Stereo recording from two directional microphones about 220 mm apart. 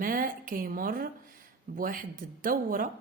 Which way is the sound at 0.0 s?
40° right (ahead or behind).